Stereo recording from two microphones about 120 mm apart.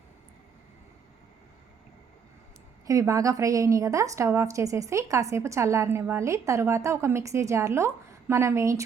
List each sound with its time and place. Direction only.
2.8 s a woman's voice: 25° right (ahead or behind)